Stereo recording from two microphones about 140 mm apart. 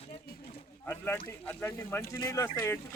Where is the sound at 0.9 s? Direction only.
15° left (ahead or behind).